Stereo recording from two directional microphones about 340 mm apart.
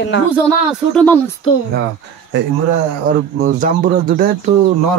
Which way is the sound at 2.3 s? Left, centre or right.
Right.